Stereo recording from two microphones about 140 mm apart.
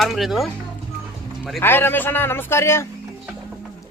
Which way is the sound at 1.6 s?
15° left (ahead or behind).